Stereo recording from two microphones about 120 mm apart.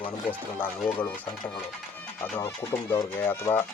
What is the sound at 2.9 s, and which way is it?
Speech, 20° left (ahead or behind).